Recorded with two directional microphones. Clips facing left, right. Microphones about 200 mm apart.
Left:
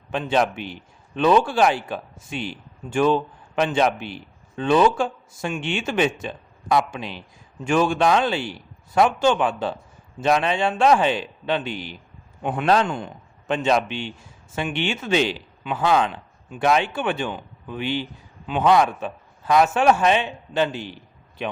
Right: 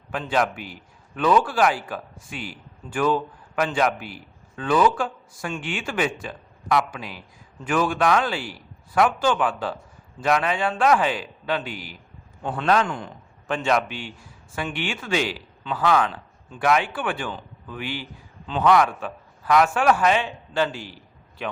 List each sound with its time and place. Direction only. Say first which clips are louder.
0.1 s a man's voice: left 2 dB; 25° left (ahead or behind)
12.6 s a man's voice: left 1 dB; 30° left (ahead or behind)